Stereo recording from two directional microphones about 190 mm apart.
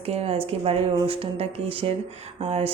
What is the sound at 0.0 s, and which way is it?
A woman's voice, 35° right (ahead or behind).